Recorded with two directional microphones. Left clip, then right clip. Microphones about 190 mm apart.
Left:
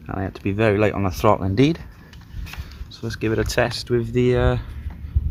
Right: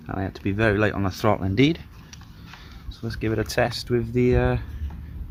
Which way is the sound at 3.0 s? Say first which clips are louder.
Left 4 dB; 10° left (ahead or behind).